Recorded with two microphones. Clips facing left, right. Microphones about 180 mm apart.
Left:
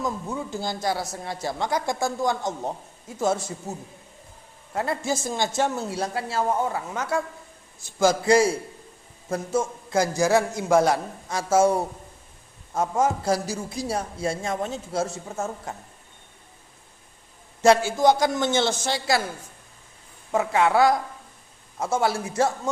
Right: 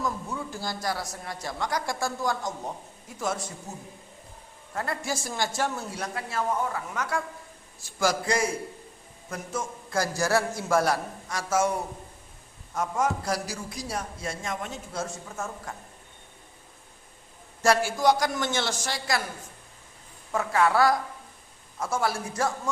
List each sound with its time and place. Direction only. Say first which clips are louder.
0.0 s a man's voice: left 3 dB; 20° left (ahead or behind)
4.7 s a man's voice: left 5 dB; 25° left (ahead or behind)
17.6 s a man's voice: left 5 dB; 20° left (ahead or behind)
20.3 s a man's voice: left 3 dB; 20° left (ahead or behind)